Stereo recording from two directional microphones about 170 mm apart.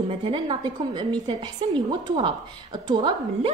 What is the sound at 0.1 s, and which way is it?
A woman's voice, 30° right (ahead or behind).